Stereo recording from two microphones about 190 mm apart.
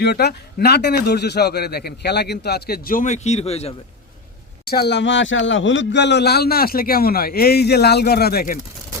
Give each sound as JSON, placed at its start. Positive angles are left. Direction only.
{"t": 0.0, "sound": "speech", "side_deg": 60}
{"t": 4.6, "sound": "speech", "side_deg": 55}